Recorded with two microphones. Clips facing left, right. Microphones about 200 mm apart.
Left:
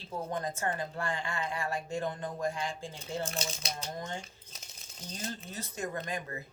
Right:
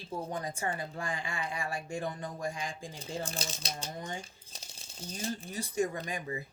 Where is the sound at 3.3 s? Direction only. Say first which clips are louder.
Left 2 dB; 35° right (ahead or behind).